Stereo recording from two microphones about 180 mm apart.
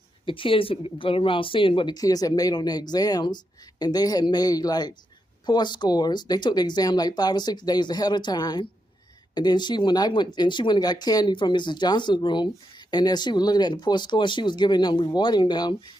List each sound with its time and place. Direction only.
0.3 s speech: 30° left (ahead or behind)